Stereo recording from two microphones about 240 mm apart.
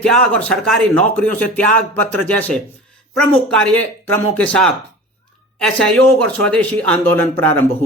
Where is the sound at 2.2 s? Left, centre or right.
Centre.